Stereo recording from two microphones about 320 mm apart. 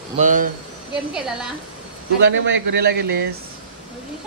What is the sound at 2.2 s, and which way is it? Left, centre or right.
A man's voice, right.